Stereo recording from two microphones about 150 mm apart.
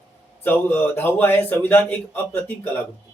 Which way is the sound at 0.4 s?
15° left (ahead or behind).